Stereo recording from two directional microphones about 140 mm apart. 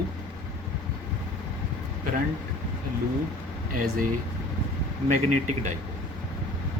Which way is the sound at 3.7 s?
80° right.